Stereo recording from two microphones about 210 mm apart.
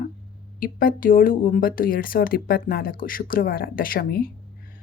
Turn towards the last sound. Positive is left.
turn(degrees=45)  # may be behind; listen again after turning